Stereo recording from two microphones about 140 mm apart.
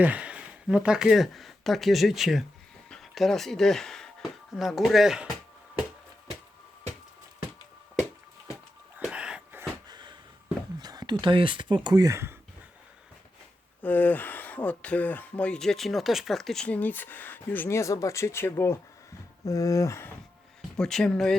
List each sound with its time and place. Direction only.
0.0 s speech: 10° right (ahead or behind)
9.0 s a sound: 5° right (ahead or behind)
9.9 s a sound: 30° right (ahead or behind)
10.8 s speech: 30° right (ahead or behind)
13.8 s speech: 10° left (ahead or behind)
20.7 s speech: 5° left (ahead or behind)